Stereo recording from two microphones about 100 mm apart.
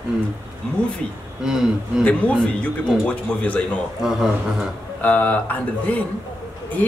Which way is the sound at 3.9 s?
5° right (ahead or behind).